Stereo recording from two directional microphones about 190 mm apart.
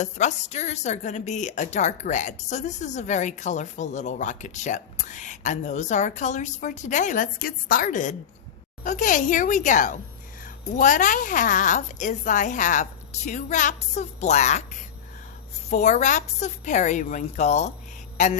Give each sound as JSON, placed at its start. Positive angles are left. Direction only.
{"t": 0.0, "sound": "a woman's voice", "side_deg": 35}
{"t": 15.7, "sound": "a woman's voice", "side_deg": 40}